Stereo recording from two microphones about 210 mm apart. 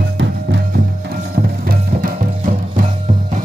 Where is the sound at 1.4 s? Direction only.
45° right (ahead or behind).